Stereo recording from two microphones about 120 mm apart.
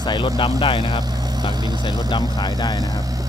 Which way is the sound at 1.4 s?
35° right (ahead or behind).